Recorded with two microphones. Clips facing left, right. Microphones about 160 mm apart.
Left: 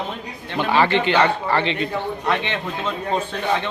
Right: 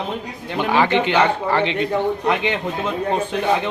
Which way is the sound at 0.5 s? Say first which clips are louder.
Right 1 dB; 15° right (ahead or behind).